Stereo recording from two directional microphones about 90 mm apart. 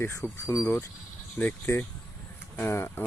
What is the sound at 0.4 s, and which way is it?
Speech, 40° left (ahead or behind).